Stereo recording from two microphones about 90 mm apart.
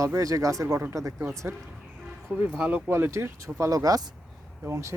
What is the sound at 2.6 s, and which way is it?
Speech, 15° right (ahead or behind).